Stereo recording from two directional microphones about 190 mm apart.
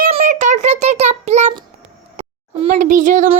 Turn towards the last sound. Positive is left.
turn(degrees=-40)  # may be behind; listen again after turning